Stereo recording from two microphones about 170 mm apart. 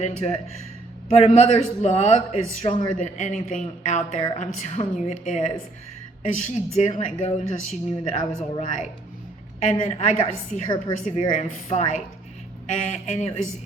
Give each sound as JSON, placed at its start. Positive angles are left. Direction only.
{"t": 0.0, "sound": "a man's voice", "side_deg": 40}